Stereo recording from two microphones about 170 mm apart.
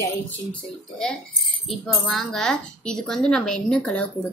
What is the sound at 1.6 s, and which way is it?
Speech, centre (ahead or behind).